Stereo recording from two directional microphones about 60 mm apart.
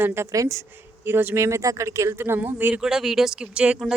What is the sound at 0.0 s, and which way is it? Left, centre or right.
Speech, right.